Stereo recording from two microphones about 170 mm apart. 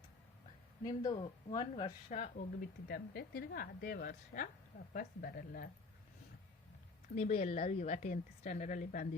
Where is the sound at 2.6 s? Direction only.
70° left (ahead or behind).